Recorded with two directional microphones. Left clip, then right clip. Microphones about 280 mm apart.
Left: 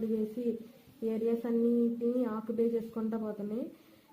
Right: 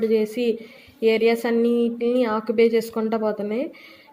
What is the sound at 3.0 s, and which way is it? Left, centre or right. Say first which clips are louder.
Speech: right 14 dB; right.